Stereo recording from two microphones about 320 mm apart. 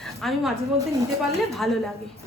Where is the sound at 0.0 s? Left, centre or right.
Centre.